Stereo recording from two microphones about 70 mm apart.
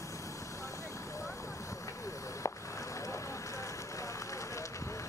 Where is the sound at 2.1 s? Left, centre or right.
Left.